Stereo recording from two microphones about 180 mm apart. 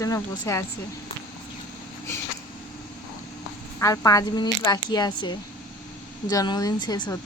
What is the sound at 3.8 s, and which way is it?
Speech, 20° left (ahead or behind).